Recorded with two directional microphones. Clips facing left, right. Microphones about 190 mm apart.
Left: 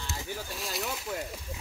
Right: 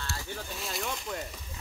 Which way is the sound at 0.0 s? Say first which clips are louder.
Even; 20° left (ahead or behind).